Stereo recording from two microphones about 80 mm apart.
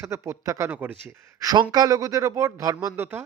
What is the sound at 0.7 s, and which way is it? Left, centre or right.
Speech, right.